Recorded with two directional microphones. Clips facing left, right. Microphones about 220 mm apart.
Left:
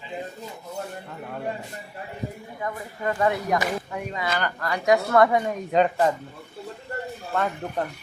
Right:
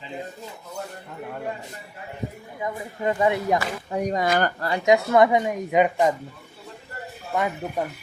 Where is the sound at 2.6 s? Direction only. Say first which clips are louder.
Right 3 dB; 15° right (ahead or behind).